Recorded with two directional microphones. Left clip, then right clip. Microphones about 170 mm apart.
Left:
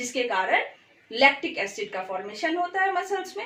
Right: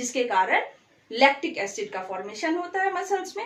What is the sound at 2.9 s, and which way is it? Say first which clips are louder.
Speech: right 1 dB; 15° right (ahead or behind).